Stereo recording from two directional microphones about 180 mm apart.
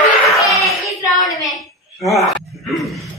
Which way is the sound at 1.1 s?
20° left (ahead or behind).